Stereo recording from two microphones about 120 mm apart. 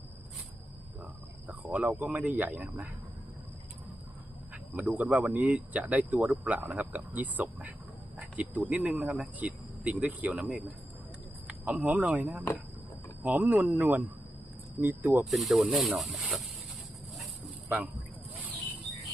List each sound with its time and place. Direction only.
1.5 s speech: 15° right (ahead or behind)
4.5 s speech: 15° right (ahead or behind)
15.2 s speech: centre (ahead or behind)